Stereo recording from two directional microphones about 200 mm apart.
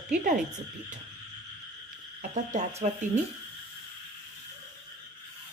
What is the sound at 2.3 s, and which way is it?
Speech, 35° right (ahead or behind).